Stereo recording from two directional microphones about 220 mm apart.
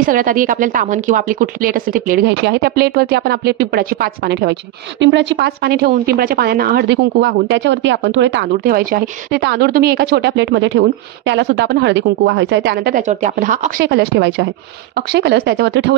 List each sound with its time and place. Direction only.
0.0 s a woman's voice: 40° right (ahead or behind); by 8.5 s 55° right (ahead or behind)
8.5 s a woman's voice: 40° right (ahead or behind)